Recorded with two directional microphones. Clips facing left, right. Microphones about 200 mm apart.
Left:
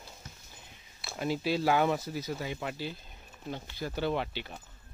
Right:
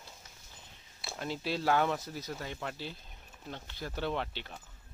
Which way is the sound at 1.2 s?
5° left (ahead or behind).